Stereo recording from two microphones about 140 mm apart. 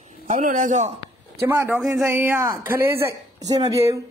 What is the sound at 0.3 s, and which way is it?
Speech, 65° right (ahead or behind).